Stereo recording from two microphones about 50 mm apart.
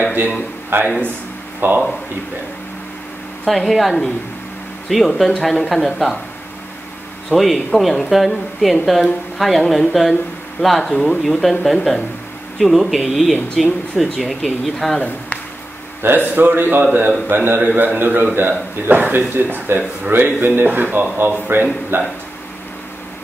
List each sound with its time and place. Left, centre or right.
0.0 s a man's voice: right
0.7 s speech: right
3.4 s speech: centre
7.2 s speech: centre
16.0 s a man's voice: right